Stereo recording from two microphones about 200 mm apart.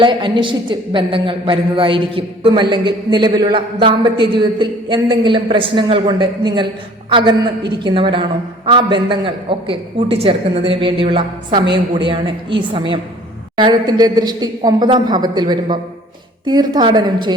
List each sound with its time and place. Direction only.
0.0 s a woman's voice: 25° right (ahead or behind)